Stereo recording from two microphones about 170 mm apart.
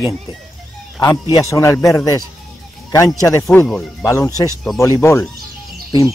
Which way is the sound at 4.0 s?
15° left (ahead or behind).